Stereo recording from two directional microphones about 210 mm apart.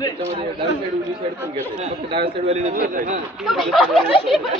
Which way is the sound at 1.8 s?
25° right (ahead or behind).